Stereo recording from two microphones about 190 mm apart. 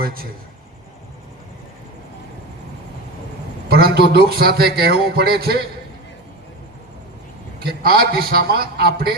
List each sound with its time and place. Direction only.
0.0 s a man's voice: 50° right (ahead or behind)
3.7 s a man's voice: 55° right (ahead or behind)
7.6 s a man's voice: 55° right (ahead or behind)